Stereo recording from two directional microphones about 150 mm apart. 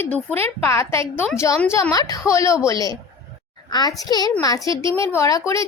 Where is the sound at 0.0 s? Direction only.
10° left (ahead or behind).